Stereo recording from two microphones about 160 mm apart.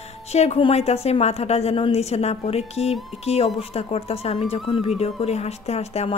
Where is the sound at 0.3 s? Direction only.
45° left (ahead or behind).